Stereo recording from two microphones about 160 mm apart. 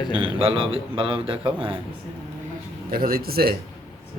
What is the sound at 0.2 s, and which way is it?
A man's voice, 35° right (ahead or behind).